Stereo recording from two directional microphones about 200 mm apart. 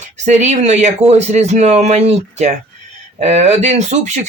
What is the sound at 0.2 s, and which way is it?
Speech, 35° right (ahead or behind).